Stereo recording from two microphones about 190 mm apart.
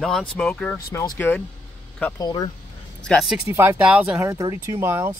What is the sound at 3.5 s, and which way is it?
Speech, 15° right (ahead or behind).